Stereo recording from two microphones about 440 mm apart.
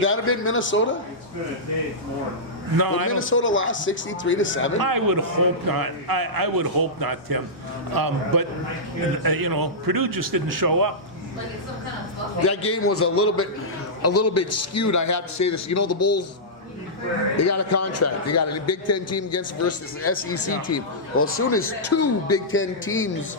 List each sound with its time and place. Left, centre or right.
0.0 s speech: left
2.7 s a man's voice: right
3.1 s speech: left
4.8 s a man's voice: right
12.7 s a man's voice: left
17.3 s a man's voice: left